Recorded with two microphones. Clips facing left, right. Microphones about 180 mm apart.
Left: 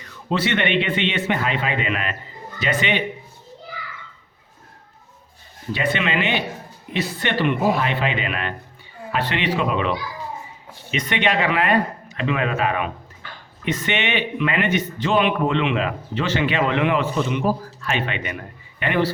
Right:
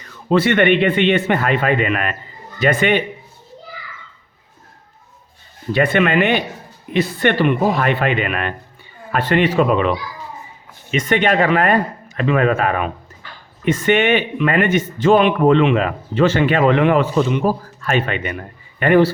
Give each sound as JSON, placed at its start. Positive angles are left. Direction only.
{"t": 0.3, "sound": "a man's voice", "side_deg": -50}
{"t": 5.7, "sound": "a man's voice", "side_deg": -55}
{"t": 10.9, "sound": "a man's voice", "side_deg": -45}